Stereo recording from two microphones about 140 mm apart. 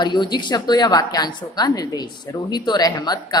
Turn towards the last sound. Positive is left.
turn(degrees=30)  # may be behind; listen again after turning